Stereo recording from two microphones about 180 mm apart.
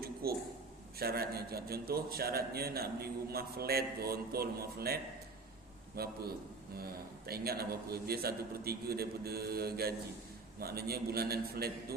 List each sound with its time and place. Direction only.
0.0 s a sound: 60° right (ahead or behind)
0.9 s a man's voice: 60° right (ahead or behind)
6.0 s a man's voice: 60° right (ahead or behind)
7.3 s a man's voice: 60° right (ahead or behind)